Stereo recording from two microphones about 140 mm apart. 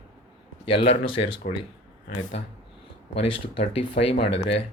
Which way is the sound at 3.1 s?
40° left (ahead or behind).